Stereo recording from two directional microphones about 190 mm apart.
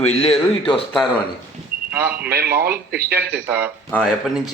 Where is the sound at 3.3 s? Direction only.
10° right (ahead or behind).